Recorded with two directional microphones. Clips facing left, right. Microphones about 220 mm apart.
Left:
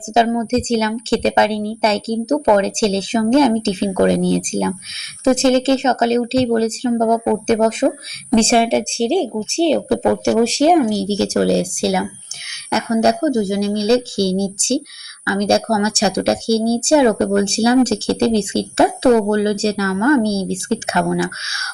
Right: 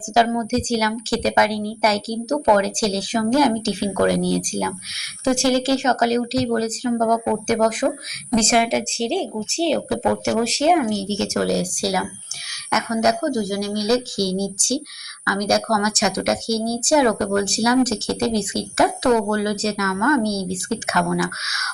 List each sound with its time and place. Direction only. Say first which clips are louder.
0.1 s a woman's voice: left 3 dB; 25° left (ahead or behind)